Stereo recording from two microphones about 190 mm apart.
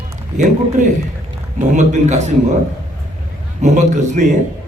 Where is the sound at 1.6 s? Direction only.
40° right (ahead or behind).